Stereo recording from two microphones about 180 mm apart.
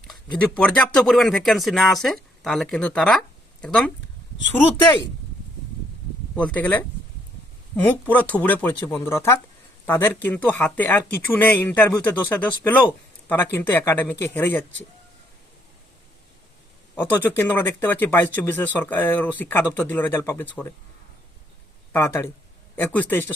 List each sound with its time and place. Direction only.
0.1 s speech: 5° left (ahead or behind)
6.3 s speech: 5° left (ahead or behind)
16.9 s speech: 10° left (ahead or behind)
21.9 s speech: 15° left (ahead or behind)